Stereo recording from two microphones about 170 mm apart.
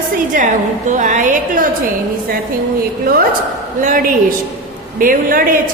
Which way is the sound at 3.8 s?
50° right (ahead or behind).